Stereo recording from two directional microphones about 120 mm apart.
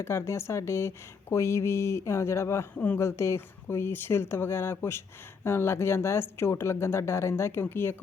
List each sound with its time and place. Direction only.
0.0 s speech: 20° left (ahead or behind)
2.7 s speech: 15° left (ahead or behind)